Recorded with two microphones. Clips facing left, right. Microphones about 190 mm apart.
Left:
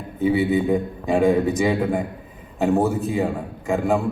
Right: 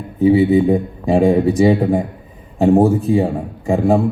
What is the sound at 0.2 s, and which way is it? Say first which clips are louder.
A man's voice: right 7 dB; 30° right (ahead or behind).